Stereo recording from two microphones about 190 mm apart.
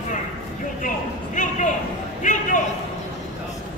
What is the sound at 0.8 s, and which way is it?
A man's voice, 40° left (ahead or behind).